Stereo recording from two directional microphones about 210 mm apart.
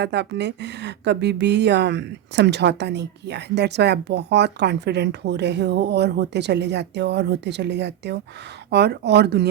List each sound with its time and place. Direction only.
0.0 s speech: 55° right (ahead or behind)